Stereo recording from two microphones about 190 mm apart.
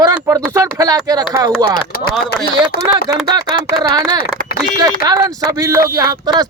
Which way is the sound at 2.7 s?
55° left (ahead or behind).